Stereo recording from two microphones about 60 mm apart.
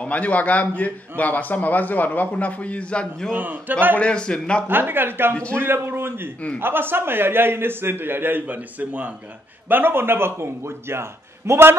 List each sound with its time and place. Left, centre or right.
0.0 s a man's voice: left
3.3 s a man's voice: right
4.0 s a man's voice: centre
4.6 s a man's voice: right
5.3 s a man's voice: centre
5.6 s a man's voice: right